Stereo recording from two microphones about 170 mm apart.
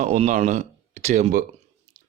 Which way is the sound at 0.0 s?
45° right (ahead or behind).